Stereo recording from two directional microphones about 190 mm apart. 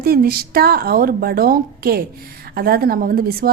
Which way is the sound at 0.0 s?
55° right (ahead or behind).